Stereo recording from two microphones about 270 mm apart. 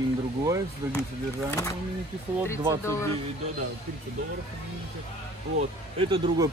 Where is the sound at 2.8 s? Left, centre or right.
Centre.